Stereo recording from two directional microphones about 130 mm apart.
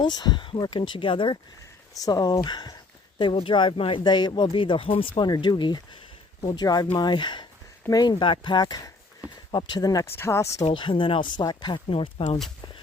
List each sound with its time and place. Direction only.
0.0 s speech: 30° left (ahead or behind)
2.0 s speech: 30° left (ahead or behind)
10.7 s speech: 40° left (ahead or behind)